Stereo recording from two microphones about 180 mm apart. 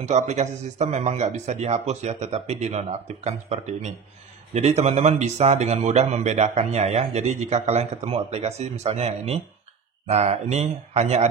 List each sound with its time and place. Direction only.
0.1 s speech: 40° right (ahead or behind)